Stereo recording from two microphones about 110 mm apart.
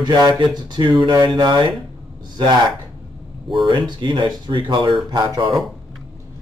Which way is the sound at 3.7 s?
45° right (ahead or behind).